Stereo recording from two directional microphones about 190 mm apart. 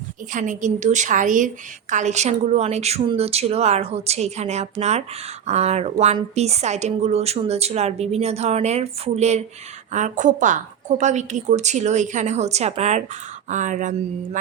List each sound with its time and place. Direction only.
0.3 s a woman's voice: 40° right (ahead or behind)